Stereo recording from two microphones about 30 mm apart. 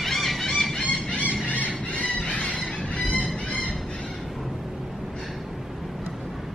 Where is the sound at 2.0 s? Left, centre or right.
Left.